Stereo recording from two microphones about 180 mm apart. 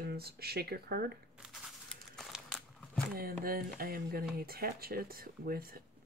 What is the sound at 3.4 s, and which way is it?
Speech, 55° right (ahead or behind).